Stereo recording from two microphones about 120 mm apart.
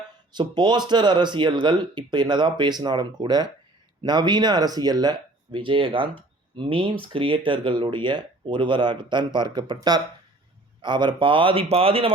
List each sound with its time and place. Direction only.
0.3 s speech: 40° right (ahead or behind)